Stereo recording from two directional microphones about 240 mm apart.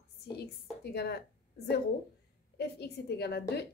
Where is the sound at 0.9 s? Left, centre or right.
Left.